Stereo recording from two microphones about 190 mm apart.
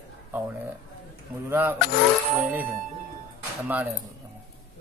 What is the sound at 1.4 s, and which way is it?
Speech, 10° right (ahead or behind).